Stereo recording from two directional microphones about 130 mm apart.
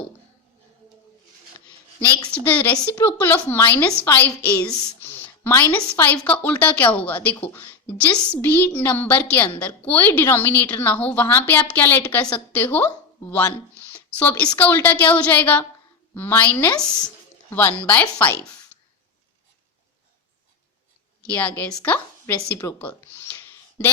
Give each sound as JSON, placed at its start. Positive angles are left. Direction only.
{"t": 2.3, "sound": "a woman's voice", "side_deg": 10}
{"t": 14.2, "sound": "a woman's voice", "side_deg": 10}
{"t": 21.2, "sound": "a woman's voice", "side_deg": 10}